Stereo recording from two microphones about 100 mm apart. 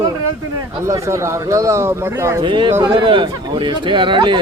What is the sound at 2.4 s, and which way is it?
Speech, 55° right (ahead or behind).